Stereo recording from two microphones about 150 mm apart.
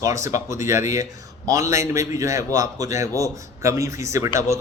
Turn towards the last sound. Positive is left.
turn(degrees=-20)  # may be behind; listen again after turning